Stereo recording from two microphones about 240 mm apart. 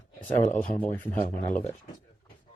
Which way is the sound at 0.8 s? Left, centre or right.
Centre.